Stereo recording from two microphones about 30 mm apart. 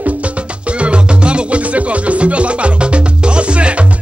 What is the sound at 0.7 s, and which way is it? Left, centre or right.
Music, right.